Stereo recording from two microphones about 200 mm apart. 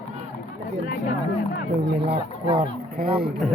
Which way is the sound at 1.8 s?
55° right (ahead or behind).